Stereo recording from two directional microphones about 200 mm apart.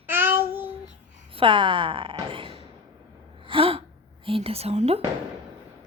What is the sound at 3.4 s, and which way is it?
Gasp, 25° right (ahead or behind).